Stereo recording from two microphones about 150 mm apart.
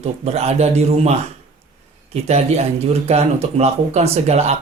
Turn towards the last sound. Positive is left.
turn(degrees=-45)  # may be behind; listen again after turning